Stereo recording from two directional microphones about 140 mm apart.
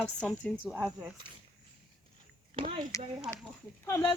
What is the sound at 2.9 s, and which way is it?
Speech, 25° left (ahead or behind).